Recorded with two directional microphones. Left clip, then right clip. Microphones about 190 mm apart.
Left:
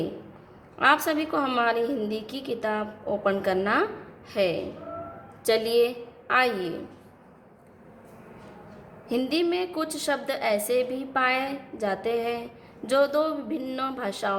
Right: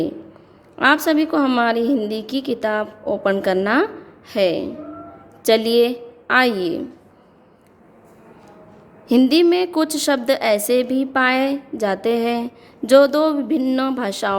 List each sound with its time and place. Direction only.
0.8 s a woman's voice: 40° right (ahead or behind)
9.0 s a woman's voice: 50° right (ahead or behind)